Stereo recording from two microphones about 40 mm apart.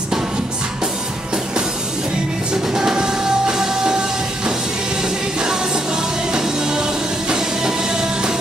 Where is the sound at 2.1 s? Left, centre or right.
Centre.